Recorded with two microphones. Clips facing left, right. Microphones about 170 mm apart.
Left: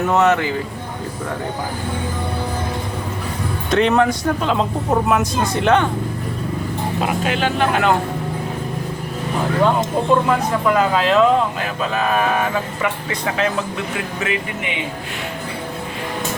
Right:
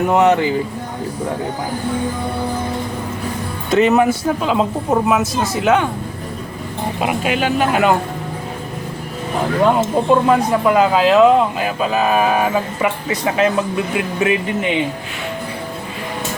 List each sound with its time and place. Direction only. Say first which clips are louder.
0.1 s speech: right 2 dB; 15° right (ahead or behind)
3.7 s speech: right 3 dB; 5° right (ahead or behind)
7.0 s speech: right 2 dB; 10° right (ahead or behind)
10.1 s speech: right 3 dB; 15° right (ahead or behind)